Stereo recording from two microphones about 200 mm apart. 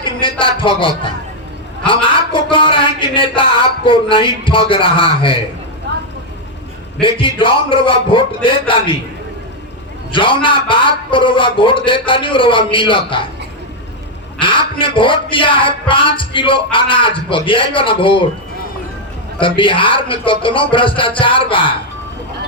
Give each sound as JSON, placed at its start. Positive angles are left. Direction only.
{"t": 0.0, "sound": "a sound", "side_deg": 25}
{"t": 1.9, "sound": "music", "side_deg": 25}
{"t": 3.2, "sound": "a man's voice", "side_deg": 25}
{"t": 5.9, "sound": "vehicle", "side_deg": -60}
{"t": 7.0, "sound": "a man's voice", "side_deg": 25}
{"t": 10.1, "sound": "a man's voice", "side_deg": 25}
{"t": 14.3, "sound": "a sound", "side_deg": 25}
{"t": 14.8, "sound": "a man's voice", "side_deg": 25}
{"t": 19.4, "sound": "a man's voice", "side_deg": 25}